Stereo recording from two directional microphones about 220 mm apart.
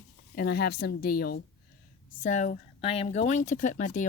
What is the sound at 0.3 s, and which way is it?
A woman's voice, 50° left (ahead or behind).